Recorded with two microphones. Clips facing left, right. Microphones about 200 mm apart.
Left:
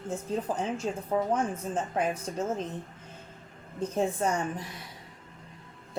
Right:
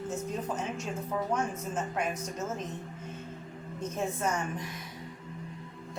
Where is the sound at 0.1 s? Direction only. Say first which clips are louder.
Left 5 dB; 30° left (ahead or behind).